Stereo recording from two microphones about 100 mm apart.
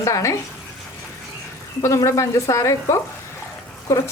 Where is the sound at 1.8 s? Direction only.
30° left (ahead or behind).